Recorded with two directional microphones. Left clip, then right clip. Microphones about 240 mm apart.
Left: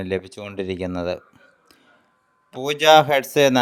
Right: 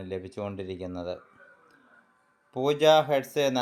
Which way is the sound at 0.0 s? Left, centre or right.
Left.